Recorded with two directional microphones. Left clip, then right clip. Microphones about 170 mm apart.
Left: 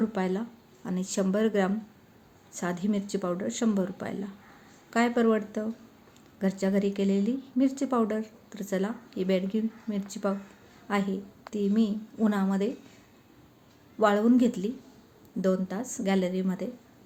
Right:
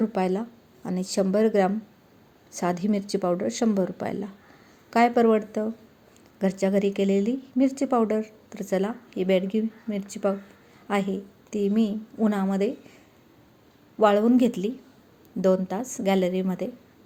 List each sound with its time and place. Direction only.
0.0 s a woman's voice: 30° right (ahead or behind)
14.0 s speech: 30° right (ahead or behind)